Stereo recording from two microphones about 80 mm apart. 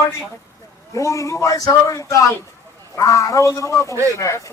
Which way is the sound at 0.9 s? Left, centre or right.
Left.